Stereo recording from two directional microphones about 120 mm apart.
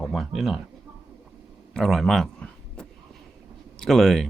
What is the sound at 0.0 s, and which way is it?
Speech, centre (ahead or behind).